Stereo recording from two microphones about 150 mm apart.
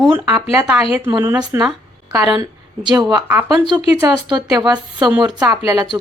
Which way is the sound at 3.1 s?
25° right (ahead or behind).